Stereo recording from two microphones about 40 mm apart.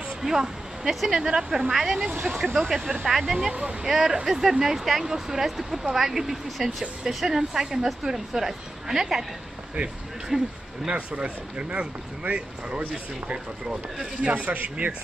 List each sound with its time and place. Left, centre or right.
0.2 s speech: centre
3.1 s speech: centre
9.8 s speech: right
10.3 s speech: centre
10.9 s speech: right
14.2 s speech: right